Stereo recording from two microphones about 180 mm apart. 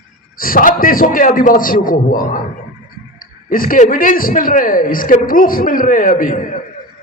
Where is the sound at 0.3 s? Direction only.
50° left (ahead or behind).